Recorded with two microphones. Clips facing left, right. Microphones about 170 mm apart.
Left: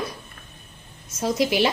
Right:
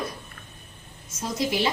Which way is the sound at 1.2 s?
80° left.